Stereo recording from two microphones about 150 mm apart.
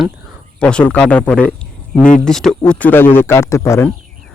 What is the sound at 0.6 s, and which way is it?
Speech, 10° left (ahead or behind).